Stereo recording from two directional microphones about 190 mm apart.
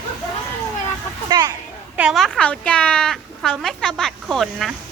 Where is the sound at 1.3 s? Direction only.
25° right (ahead or behind).